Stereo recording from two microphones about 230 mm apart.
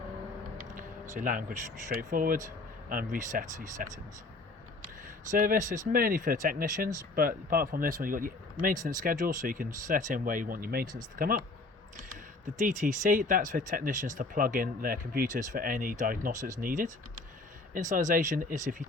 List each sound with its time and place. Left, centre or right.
1.2 s speech: right
5.4 s speech: right
12.5 s speech: right